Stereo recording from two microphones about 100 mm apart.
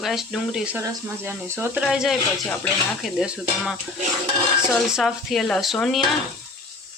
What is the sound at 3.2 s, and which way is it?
Stir, 10° right (ahead or behind).